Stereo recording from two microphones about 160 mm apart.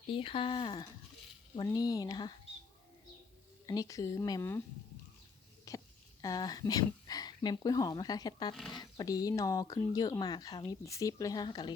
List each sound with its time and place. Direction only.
0.1 s speech: 35° left (ahead or behind)
3.7 s speech: 20° left (ahead or behind)
5.7 s a sound: 20° left (ahead or behind)
6.2 s speech: 25° left (ahead or behind)